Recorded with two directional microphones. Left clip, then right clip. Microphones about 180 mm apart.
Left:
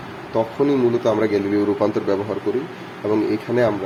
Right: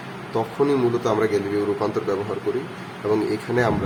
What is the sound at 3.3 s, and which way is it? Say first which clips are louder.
Speech: left 3 dB; 15° left (ahead or behind).